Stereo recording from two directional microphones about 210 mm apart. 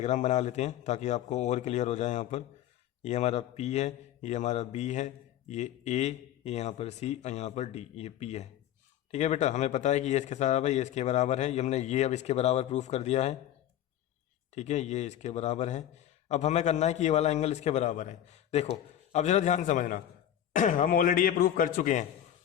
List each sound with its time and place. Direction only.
0.0 s a man's voice: 35° left (ahead or behind)
14.5 s a man's voice: 35° left (ahead or behind)